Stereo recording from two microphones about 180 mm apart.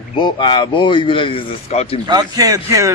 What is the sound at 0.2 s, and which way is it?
Speech, 25° left (ahead or behind).